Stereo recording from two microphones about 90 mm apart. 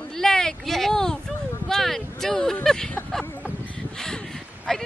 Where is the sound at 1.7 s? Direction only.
5° left (ahead or behind).